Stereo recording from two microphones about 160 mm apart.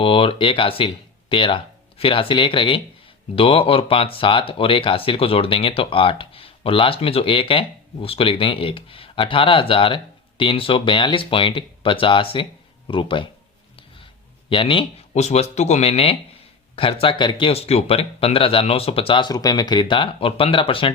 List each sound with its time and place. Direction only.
0.0 s speech: 35° left (ahead or behind)
14.5 s speech: 30° left (ahead or behind)